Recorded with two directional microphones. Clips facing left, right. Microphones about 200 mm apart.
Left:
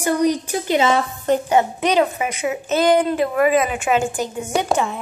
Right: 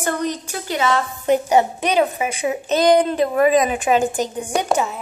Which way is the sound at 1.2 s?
10° right (ahead or behind).